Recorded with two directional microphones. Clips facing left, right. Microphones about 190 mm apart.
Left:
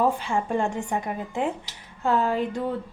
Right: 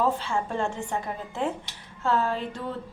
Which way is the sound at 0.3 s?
15° left (ahead or behind).